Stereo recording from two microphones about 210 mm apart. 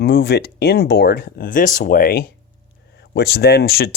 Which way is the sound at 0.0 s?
50° left (ahead or behind).